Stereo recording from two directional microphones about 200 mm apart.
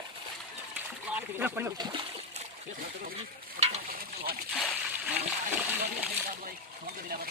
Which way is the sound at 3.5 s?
35° right (ahead or behind).